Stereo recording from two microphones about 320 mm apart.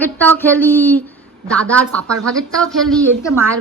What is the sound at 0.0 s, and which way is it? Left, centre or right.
A woman's voice, centre.